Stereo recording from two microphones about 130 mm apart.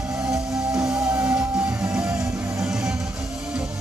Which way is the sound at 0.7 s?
30° right (ahead or behind).